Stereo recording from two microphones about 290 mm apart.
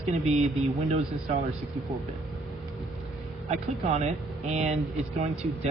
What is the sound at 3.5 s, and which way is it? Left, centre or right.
Speech, right.